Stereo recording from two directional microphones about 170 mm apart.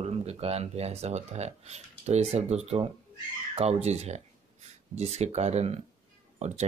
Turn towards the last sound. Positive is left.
turn(degrees=-40)  # may be behind; listen again after turning